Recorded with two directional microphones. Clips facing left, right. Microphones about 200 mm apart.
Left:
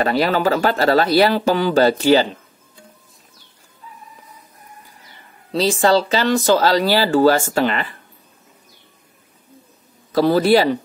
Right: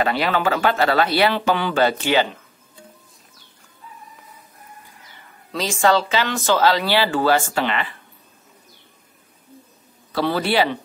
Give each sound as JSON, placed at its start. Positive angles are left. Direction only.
{"t": 0.0, "sound": "speech", "side_deg": 40}
{"t": 5.5, "sound": "speech", "side_deg": 35}
{"t": 10.1, "sound": "speech", "side_deg": 40}